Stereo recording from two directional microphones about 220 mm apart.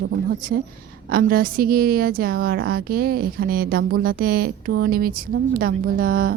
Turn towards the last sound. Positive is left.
turn(degrees=-40)  # may be behind; listen again after turning